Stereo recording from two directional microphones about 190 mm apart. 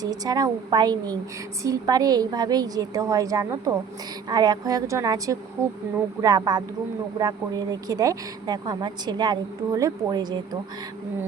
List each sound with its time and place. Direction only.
0.0 s a woman's voice: 20° right (ahead or behind)